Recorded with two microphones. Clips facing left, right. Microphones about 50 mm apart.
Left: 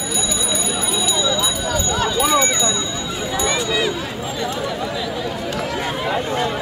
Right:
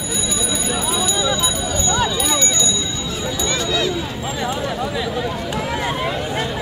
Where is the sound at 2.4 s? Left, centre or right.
Centre.